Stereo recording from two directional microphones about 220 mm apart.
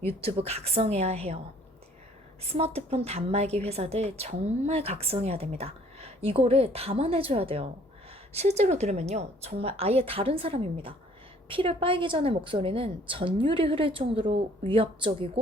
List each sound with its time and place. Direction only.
0.2 s a woman's voice: 25° right (ahead or behind)
2.4 s a woman's voice: 25° right (ahead or behind)